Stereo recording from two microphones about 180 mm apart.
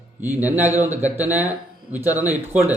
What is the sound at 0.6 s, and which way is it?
Speech, 40° right (ahead or behind).